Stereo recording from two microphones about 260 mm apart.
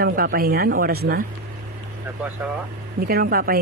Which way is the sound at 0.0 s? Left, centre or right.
Right.